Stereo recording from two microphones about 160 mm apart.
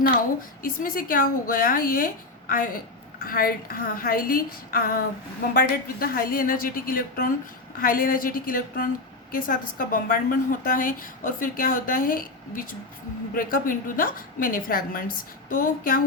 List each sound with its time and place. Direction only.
0.6 s a woman's voice: 60° left (ahead or behind)